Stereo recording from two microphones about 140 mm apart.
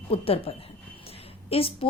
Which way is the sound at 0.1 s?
40° left (ahead or behind).